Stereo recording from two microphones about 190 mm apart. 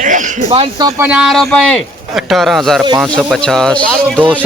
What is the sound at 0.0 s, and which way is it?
Speech, 40° right (ahead or behind).